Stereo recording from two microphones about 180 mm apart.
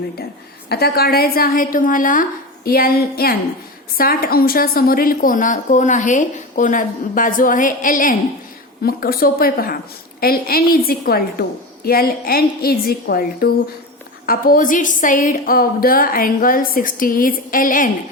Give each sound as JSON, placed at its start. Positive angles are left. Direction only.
{"t": 0.7, "sound": "a woman's voice", "side_deg": 60}